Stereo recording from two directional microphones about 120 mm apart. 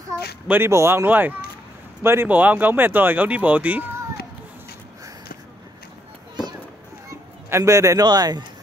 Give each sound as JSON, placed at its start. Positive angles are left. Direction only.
{"t": 0.1, "sound": "a sound", "side_deg": -25}
{"t": 0.5, "sound": "a man's voice", "side_deg": -20}
{"t": 7.4, "sound": "a man's voice", "side_deg": -25}